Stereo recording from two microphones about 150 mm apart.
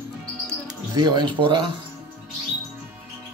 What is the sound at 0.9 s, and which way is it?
Speech, 30° right (ahead or behind).